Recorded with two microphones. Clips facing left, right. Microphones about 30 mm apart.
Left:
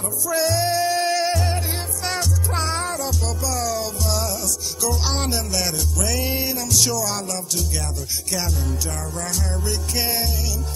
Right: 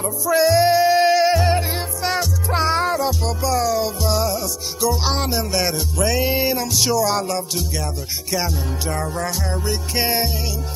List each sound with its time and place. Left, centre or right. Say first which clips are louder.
0.0 s music: right 5 dB; centre